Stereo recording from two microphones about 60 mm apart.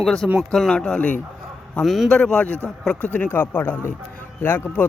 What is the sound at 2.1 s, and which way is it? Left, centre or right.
Speech, centre.